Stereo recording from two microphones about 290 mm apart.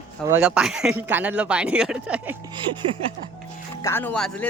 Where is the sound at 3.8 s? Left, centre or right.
Centre.